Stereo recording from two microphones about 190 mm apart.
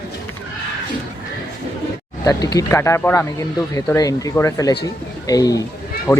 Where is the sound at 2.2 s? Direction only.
15° left (ahead or behind).